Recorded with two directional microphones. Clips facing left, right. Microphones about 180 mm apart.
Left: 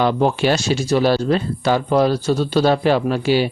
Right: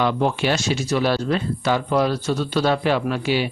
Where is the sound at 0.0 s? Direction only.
35° left (ahead or behind).